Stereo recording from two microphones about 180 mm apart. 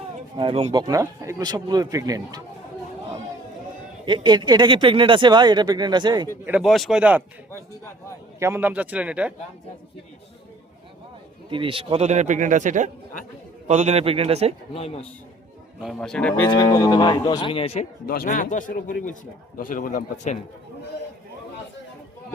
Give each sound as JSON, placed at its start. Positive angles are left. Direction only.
{"t": 0.3, "sound": "speech", "side_deg": -30}
{"t": 4.0, "sound": "speech", "side_deg": -25}
{"t": 6.4, "sound": "speech", "side_deg": -5}
{"t": 8.4, "sound": "speech", "side_deg": -15}
{"t": 11.4, "sound": "a man's voice", "side_deg": -30}
{"t": 14.7, "sound": "speech", "side_deg": 35}
{"t": 15.8, "sound": "speech", "side_deg": 0}
{"t": 16.5, "sound": "speech", "side_deg": 20}
{"t": 18.0, "sound": "speech", "side_deg": 55}